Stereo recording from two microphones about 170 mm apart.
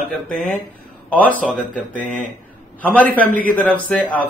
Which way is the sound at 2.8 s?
10° left (ahead or behind).